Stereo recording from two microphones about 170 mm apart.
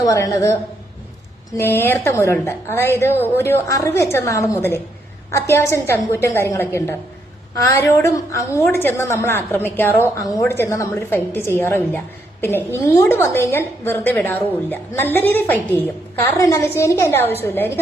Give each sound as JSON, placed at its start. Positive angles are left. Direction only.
{"t": 0.0, "sound": "a woman's voice", "side_deg": 20}